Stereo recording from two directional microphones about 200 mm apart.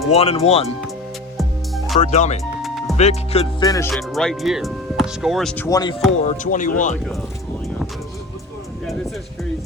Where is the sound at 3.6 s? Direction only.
15° left (ahead or behind).